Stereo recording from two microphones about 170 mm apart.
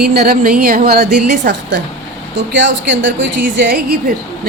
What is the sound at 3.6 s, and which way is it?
Speech, 65° right (ahead or behind).